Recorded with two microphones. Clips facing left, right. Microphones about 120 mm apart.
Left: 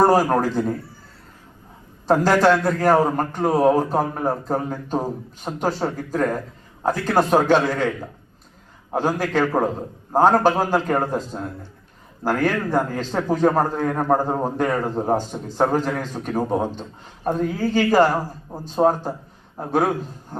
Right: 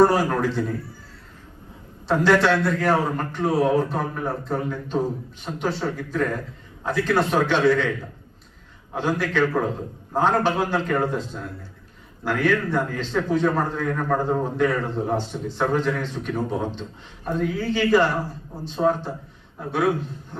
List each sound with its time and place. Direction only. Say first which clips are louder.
0.0 s a man's voice: left 2 dB; 40° left (ahead or behind)
2.0 s a man's voice: left 2 dB; 40° left (ahead or behind)
8.9 s a man's voice: left 3 dB; 40° left (ahead or behind)